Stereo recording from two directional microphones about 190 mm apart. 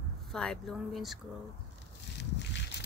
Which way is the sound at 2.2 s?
65° left (ahead or behind).